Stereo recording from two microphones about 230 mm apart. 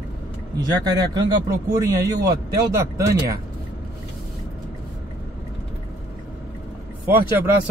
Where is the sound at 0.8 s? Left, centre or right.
Centre.